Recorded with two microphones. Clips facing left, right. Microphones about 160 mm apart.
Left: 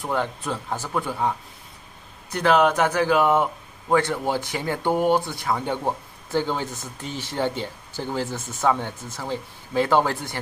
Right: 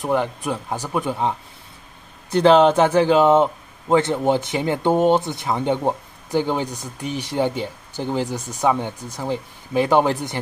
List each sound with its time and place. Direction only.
0.0 s speech: 15° right (ahead or behind)
2.3 s speech: 30° right (ahead or behind)